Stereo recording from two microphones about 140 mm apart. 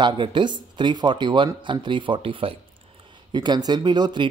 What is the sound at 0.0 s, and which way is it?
Speech, 35° right (ahead or behind).